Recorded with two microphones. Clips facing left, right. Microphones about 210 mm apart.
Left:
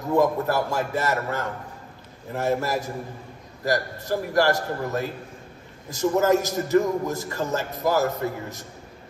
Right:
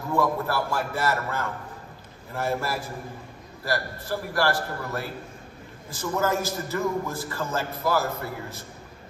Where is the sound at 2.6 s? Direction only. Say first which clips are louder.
Left 4 dB; 40° left (ahead or behind).